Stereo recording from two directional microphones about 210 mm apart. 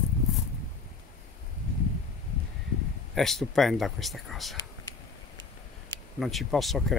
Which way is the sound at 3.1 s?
Centre (ahead or behind).